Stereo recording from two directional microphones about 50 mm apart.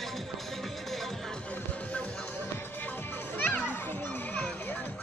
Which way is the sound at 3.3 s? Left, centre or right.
Left.